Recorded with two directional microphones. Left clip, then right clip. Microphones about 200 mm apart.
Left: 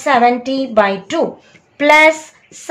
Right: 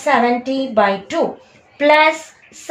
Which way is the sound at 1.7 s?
25° left (ahead or behind).